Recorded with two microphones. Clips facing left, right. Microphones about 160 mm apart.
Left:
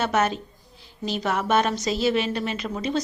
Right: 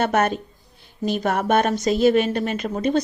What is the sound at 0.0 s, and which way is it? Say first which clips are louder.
A woman's voice: right 3 dB; 55° right (ahead or behind).